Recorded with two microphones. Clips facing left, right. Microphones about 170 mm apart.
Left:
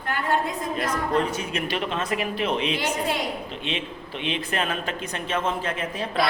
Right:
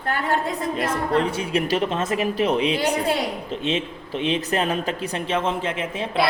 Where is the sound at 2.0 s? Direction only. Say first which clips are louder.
Right 4 dB; 25° right (ahead or behind).